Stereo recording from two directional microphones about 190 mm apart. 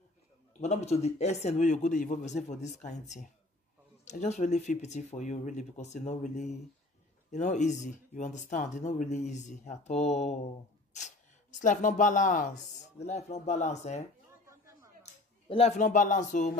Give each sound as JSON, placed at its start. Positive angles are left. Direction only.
{"t": 0.6, "sound": "speech", "side_deg": 35}
{"t": 15.4, "sound": "speech", "side_deg": 30}